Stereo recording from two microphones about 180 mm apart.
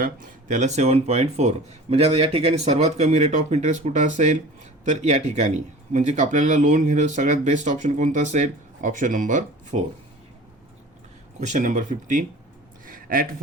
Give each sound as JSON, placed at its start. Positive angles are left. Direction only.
{"t": 0.0, "sound": "speech", "side_deg": -45}
{"t": 11.3, "sound": "speech", "side_deg": -40}
{"t": 12.8, "sound": "a sound", "side_deg": -50}